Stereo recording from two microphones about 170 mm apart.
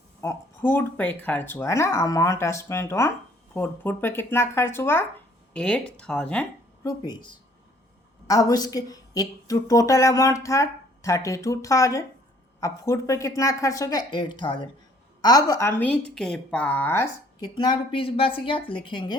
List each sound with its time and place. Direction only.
0.2 s speech: 15° left (ahead or behind)
8.3 s a woman's voice: 20° left (ahead or behind)
17.4 s a woman's voice: 25° left (ahead or behind)